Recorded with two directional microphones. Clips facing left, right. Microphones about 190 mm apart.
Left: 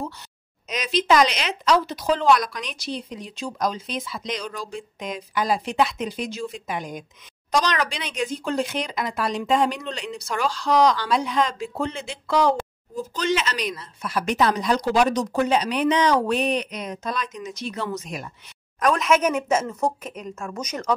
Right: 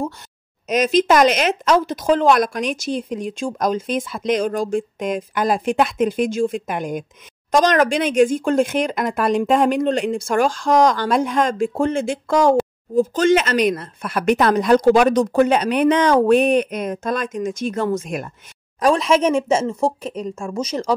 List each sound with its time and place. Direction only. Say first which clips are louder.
0.7 s speech: right 6 dB; 50° right (ahead or behind)
18.8 s speech: right 4 dB; 30° right (ahead or behind)